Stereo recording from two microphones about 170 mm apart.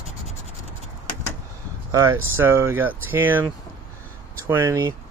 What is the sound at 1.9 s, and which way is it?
Speech, 15° right (ahead or behind).